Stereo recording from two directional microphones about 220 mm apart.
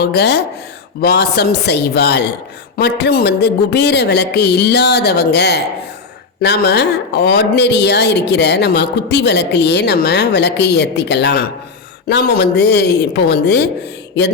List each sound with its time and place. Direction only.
0.0 s speech: 50° left (ahead or behind)